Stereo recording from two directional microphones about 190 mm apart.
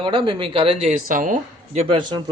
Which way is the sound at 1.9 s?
25° right (ahead or behind).